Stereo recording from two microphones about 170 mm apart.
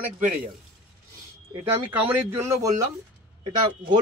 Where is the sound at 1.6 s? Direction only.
10° right (ahead or behind).